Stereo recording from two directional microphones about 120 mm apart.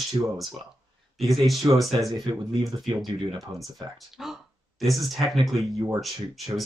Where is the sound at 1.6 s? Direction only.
35° right (ahead or behind).